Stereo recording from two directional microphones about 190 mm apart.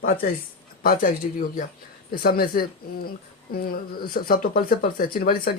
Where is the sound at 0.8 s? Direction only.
50° left (ahead or behind).